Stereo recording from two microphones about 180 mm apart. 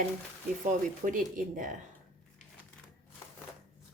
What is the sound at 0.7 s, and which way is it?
A woman's voice, 45° right (ahead or behind).